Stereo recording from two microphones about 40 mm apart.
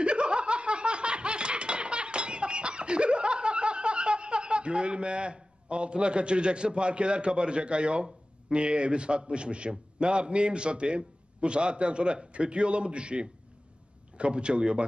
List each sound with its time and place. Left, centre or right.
0.0 s laughter: right
14.1 s a man's voice: right